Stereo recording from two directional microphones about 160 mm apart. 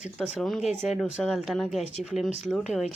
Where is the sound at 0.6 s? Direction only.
45° left (ahead or behind).